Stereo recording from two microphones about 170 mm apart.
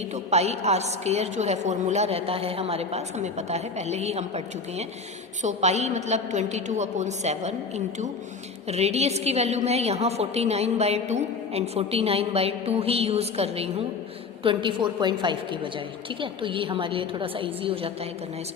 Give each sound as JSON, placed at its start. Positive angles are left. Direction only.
{"t": 0.3, "sound": "a woman's voice", "side_deg": -40}
{"t": 8.6, "sound": "a woman's voice", "side_deg": -40}